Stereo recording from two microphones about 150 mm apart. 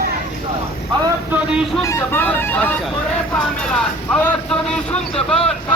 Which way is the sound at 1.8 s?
20° left (ahead or behind).